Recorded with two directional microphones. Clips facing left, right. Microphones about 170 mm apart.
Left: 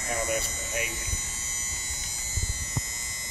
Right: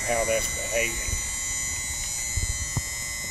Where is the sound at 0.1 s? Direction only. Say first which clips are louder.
Right 5 dB; 65° right (ahead or behind).